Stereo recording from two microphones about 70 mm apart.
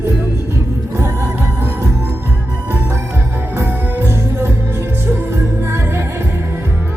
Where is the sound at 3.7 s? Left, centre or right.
Right.